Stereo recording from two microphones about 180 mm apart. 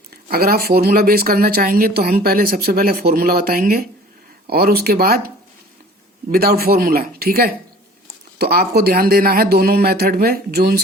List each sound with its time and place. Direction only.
0.1 s speech: 55° right (ahead or behind)
6.3 s speech: 60° right (ahead or behind)